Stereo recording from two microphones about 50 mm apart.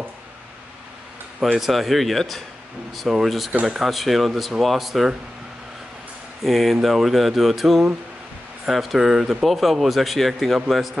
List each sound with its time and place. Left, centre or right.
1.5 s speech: centre
6.4 s speech: centre